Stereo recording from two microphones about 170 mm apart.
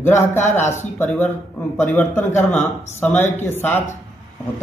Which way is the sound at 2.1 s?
45° left (ahead or behind).